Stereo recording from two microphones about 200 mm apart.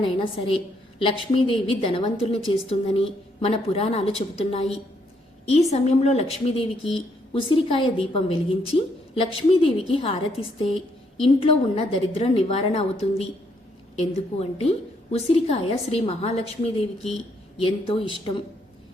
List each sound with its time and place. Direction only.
0.0 s a woman's voice: 25° left (ahead or behind)
11.2 s a woman's voice: 25° left (ahead or behind)